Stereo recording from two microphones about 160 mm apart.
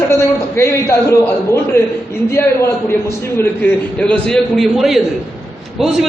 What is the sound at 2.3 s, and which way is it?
A man's voice, 15° left (ahead or behind).